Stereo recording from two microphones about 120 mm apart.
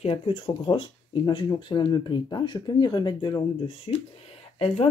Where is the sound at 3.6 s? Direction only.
55° left (ahead or behind).